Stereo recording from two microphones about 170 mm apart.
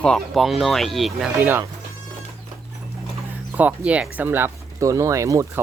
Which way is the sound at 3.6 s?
10° right (ahead or behind).